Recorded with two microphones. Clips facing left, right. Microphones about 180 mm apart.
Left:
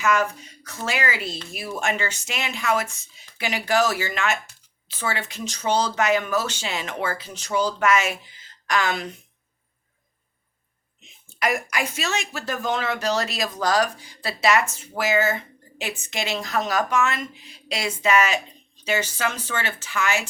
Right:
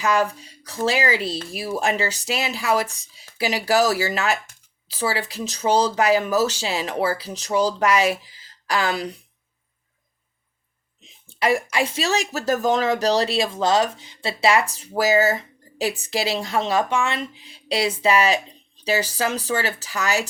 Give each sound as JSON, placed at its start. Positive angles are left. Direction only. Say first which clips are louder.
{"t": 0.0, "sound": "speech", "louder": "right 1 dB", "side_deg": -35}
{"t": 11.3, "sound": "speech", "louder": "right 4 dB", "side_deg": -30}